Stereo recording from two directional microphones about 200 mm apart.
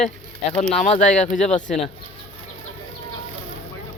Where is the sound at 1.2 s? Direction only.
35° left (ahead or behind).